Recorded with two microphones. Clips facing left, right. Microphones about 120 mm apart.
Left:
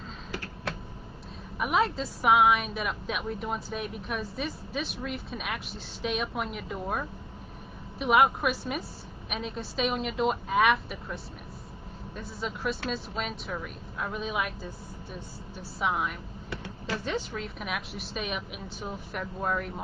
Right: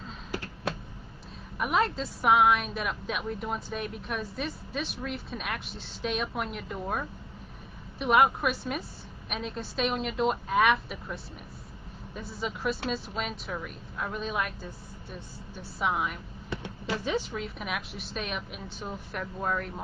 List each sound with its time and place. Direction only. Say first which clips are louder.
0.3 s a sound: right 3 dB; 20° right (ahead or behind)
1.6 s a woman's voice: left 1 dB; centre (ahead or behind)
12.2 s a woman's voice: right 1 dB; centre (ahead or behind)
15.8 s a woman's voice: even; centre (ahead or behind)
16.4 s a sound: right 2 dB; 20° right (ahead or behind)
17.0 s a woman's voice: right 3 dB; 10° right (ahead or behind)